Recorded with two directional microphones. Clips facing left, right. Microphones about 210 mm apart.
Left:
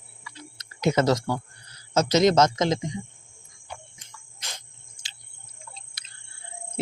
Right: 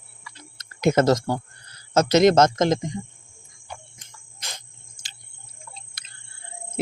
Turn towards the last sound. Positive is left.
turn(degrees=-55)  # may be behind; listen again after turning